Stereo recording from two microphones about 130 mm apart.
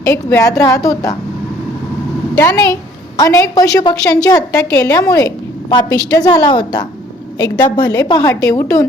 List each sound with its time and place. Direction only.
0.0 s a woman's voice: 25° left (ahead or behind)
2.4 s a woman's voice: 25° left (ahead or behind)